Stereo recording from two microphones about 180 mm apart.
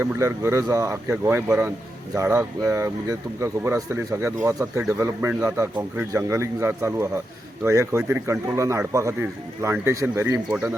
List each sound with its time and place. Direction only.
0.0 s speech: 15° right (ahead or behind)